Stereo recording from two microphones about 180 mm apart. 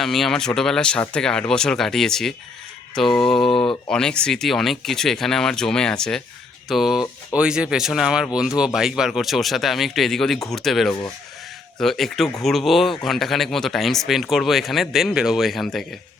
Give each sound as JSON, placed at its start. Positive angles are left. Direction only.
{"t": 0.0, "sound": "speech", "side_deg": 0}
{"t": 3.5, "sound": "speech", "side_deg": 30}
{"t": 3.8, "sound": "speech", "side_deg": 5}